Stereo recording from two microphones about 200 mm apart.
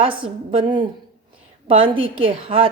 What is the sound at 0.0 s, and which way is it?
A woman's voice, 25° right (ahead or behind).